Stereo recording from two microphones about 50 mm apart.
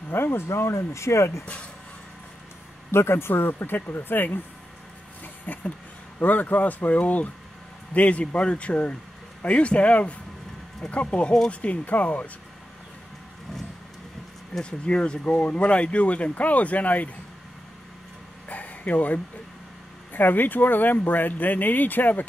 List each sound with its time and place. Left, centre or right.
0.1 s speech: left
2.9 s speech: left
5.2 s a sound: left
6.1 s speech: left
14.6 s speech: centre
18.5 s a sound: left
20.1 s speech: left